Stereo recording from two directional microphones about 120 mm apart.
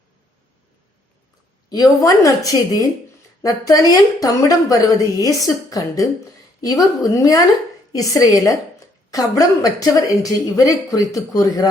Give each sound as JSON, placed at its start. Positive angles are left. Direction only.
{"t": 1.7, "sound": "a woman's voice", "side_deg": 30}